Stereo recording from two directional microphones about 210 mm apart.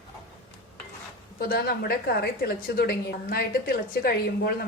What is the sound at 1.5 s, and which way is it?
A woman's voice, 45° left (ahead or behind).